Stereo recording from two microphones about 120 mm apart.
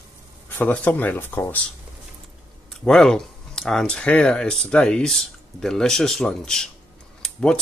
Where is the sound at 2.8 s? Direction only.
5° left (ahead or behind).